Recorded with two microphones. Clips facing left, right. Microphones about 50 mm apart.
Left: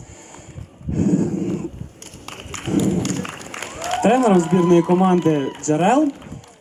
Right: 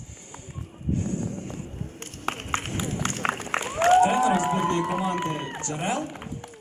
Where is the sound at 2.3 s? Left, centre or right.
Right.